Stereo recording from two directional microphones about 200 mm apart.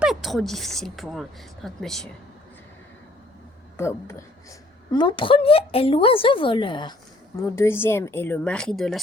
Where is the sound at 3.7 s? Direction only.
15° left (ahead or behind).